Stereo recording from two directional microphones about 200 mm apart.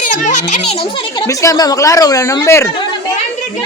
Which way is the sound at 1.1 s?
15° left (ahead or behind).